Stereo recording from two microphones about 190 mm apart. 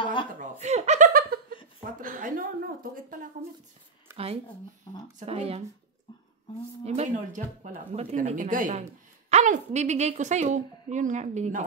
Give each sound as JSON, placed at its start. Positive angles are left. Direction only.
{"t": 0.0, "sound": "chuckle", "side_deg": 25}
{"t": 0.4, "sound": "chuckle", "side_deg": -35}
{"t": 2.0, "sound": "a sound", "side_deg": -45}
{"t": 4.1, "sound": "a sound", "side_deg": -15}
{"t": 5.2, "sound": "a woman's voice", "side_deg": -30}
{"t": 6.8, "sound": "a woman's voice", "side_deg": -35}